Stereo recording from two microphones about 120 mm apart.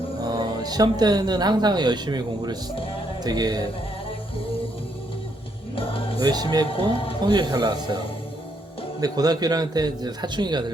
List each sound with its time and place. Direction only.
0.2 s a man's voice: 30° right (ahead or behind)
5.7 s music: 50° left (ahead or behind)
6.1 s a man's voice: 35° right (ahead or behind)
6.7 s speech: 50° left (ahead or behind)
7.2 s a man's voice: 35° right (ahead or behind)